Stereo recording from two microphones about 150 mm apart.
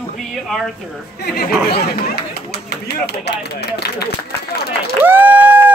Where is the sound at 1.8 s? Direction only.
90° left.